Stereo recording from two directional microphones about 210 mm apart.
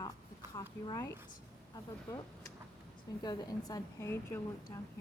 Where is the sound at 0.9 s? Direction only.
15° left (ahead or behind).